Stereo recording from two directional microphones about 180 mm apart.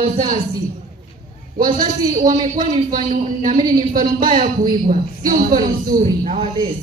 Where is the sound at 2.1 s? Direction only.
45° right (ahead or behind).